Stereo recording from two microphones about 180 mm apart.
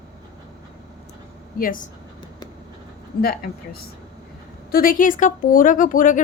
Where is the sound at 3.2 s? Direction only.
60° left (ahead or behind).